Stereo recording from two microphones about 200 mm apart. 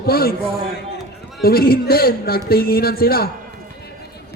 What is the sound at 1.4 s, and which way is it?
A man's voice, 50° left (ahead or behind).